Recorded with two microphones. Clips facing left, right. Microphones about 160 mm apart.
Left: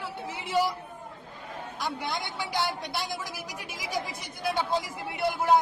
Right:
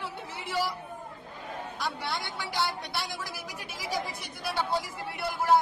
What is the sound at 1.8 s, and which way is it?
A man's voice, 15° left (ahead or behind).